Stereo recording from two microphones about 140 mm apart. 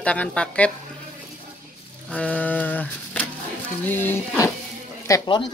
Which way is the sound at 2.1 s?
10° left (ahead or behind).